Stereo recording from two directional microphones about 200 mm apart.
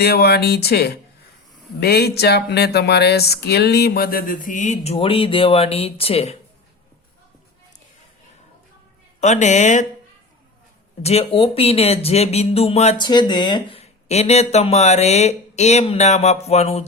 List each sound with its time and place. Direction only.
0.0 s speech: 55° left (ahead or behind); by 6.3 s 30° left (ahead or behind)
9.2 s speech: 35° left (ahead or behind)
11.0 s speech: 30° left (ahead or behind)